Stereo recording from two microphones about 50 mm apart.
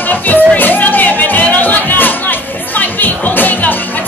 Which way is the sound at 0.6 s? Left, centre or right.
Left.